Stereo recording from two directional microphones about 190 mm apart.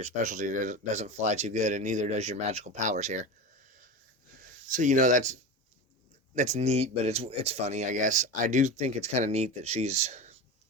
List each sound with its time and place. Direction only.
0.0 s speech: 40° right (ahead or behind)
4.7 s speech: 40° right (ahead or behind)